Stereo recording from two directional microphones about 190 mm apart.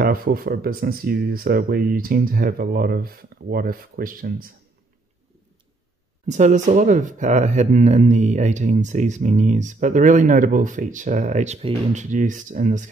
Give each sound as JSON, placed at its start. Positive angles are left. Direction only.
{"t": 0.0, "sound": "speech", "side_deg": -50}
{"t": 6.2, "sound": "speech", "side_deg": -40}